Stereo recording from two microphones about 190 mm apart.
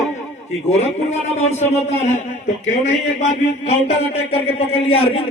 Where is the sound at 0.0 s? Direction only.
35° left (ahead or behind).